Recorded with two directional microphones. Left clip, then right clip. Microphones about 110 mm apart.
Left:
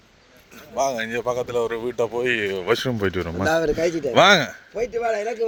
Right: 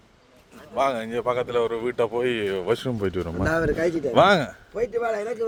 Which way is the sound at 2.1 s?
20° right (ahead or behind).